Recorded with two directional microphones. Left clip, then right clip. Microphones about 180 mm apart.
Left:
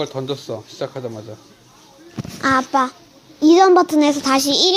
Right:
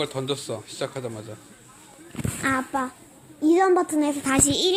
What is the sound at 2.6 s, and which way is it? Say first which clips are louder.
Speech: left 10 dB; 35° left (ahead or behind).